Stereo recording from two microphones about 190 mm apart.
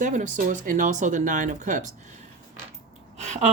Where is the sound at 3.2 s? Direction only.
35° right (ahead or behind).